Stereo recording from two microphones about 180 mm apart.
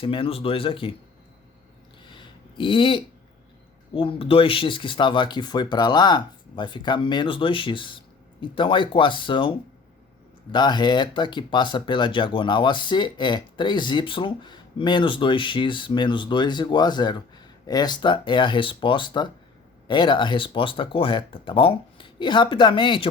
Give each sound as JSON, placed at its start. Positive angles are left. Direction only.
{"t": 0.0, "sound": "speech", "side_deg": 30}
{"t": 2.0, "sound": "a sound", "side_deg": 25}
{"t": 3.9, "sound": "speech", "side_deg": 30}